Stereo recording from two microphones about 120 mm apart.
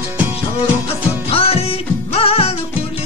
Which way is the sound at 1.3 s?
55° left (ahead or behind).